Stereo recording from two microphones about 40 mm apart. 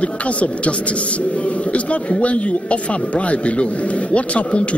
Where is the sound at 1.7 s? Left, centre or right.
Left.